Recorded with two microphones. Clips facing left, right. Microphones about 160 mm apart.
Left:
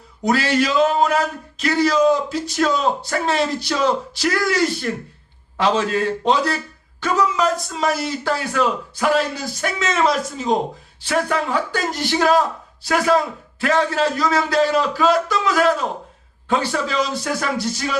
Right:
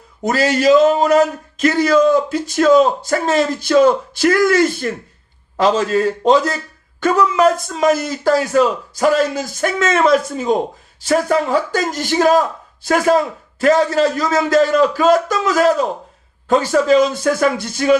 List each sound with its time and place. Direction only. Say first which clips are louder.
0.3 s a man's voice: right 5 dB; 40° right (ahead or behind)
11.0 s a man's voice: right 5 dB; 40° right (ahead or behind)